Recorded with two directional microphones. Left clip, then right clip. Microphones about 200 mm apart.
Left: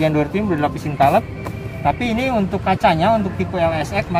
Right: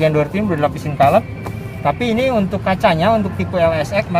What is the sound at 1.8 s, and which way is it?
Speech, 45° right (ahead or behind).